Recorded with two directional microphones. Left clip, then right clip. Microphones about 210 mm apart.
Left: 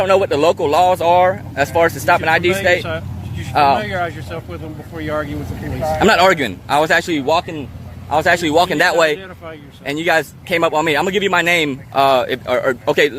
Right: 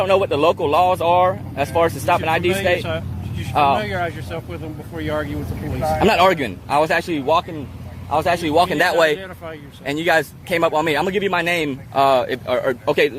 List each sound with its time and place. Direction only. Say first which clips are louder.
0.0 s a man's voice: left 3 dB; 15° left (ahead or behind)
6.0 s a man's voice: left 3 dB; 15° left (ahead or behind)